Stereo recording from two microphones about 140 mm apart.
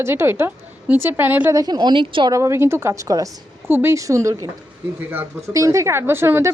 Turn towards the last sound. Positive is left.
turn(degrees=-15)  # may be behind; listen again after turning